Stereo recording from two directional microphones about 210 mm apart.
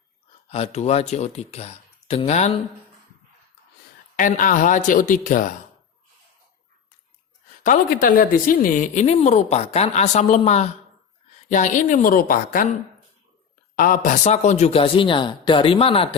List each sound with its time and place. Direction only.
0.5 s a woman's voice: 30° left (ahead or behind)
4.2 s a woman's voice: 40° left (ahead or behind)
7.6 s a woman's voice: 40° left (ahead or behind)
13.7 s speech: 40° left (ahead or behind); by 16.0 s 25° left (ahead or behind)